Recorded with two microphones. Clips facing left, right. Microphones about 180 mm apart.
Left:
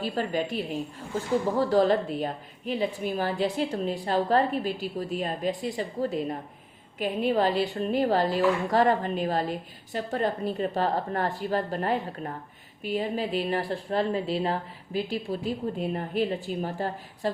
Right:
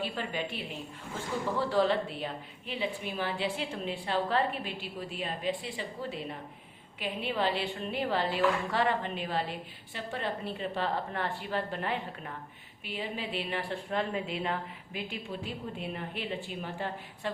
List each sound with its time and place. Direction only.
0.0 s a woman's voice: 40° left (ahead or behind)